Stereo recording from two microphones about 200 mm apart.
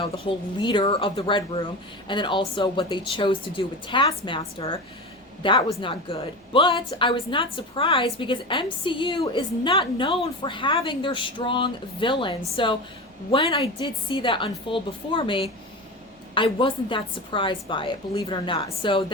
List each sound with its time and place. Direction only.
0.0 s a woman's voice: 25° left (ahead or behind)